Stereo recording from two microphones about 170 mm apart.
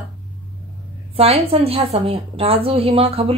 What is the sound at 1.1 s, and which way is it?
A woman's voice, 35° right (ahead or behind).